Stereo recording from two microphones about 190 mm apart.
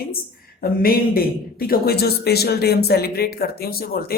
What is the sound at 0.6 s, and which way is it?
Speech, 50° left (ahead or behind).